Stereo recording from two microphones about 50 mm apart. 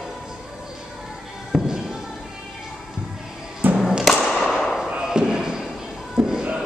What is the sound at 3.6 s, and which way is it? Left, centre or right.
Thump, right.